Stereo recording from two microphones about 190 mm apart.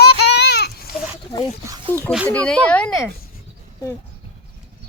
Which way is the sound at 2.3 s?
5° left (ahead or behind).